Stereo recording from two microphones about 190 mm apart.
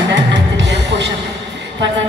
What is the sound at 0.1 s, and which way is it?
Music, 70° right (ahead or behind).